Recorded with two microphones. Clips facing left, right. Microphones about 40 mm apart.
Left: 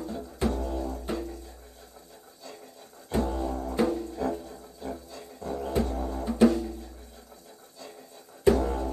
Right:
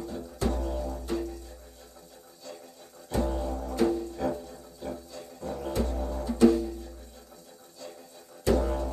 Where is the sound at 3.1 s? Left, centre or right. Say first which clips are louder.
Left 1 dB; left.